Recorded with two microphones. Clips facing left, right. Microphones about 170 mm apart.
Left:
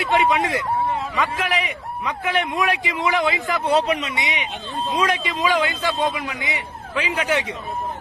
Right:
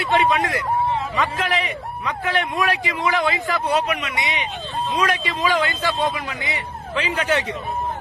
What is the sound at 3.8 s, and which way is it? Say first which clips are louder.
Speech: left 2 dB; 35° left (ahead or behind).